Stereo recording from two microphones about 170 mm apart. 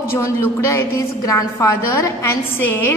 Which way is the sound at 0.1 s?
15° left (ahead or behind).